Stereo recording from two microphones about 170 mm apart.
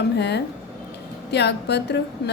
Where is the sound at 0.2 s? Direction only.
85° left.